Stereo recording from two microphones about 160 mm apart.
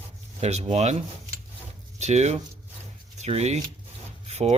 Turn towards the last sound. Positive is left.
turn(degrees=-45)  # may be behind; listen again after turning